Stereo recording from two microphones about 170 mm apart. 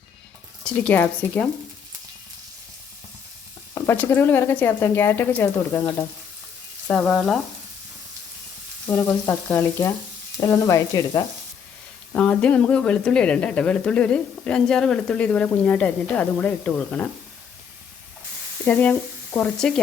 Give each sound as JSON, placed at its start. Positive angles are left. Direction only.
{"t": 0.6, "sound": "speech", "side_deg": 10}
{"t": 3.8, "sound": "speech", "side_deg": 15}
{"t": 8.9, "sound": "speech", "side_deg": 15}
{"t": 10.4, "sound": "sizzle", "side_deg": 20}
{"t": 12.1, "sound": "speech", "side_deg": 5}
{"t": 18.6, "sound": "speech", "side_deg": 10}